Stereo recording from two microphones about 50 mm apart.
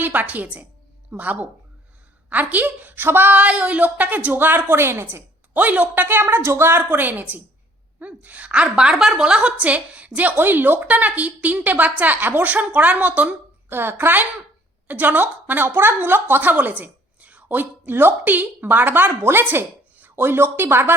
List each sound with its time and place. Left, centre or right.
0.0 s a woman's voice: right
3.1 s a woman's voice: right
3.3 s a woman's voice: right
4.4 s a woman's voice: right
5.5 s a woman's voice: right; by 9.2 s centre
9.2 s a woman's voice: centre
10.3 s a woman's voice: right
13.7 s a woman's voice: right
13.9 s a woman's voice: right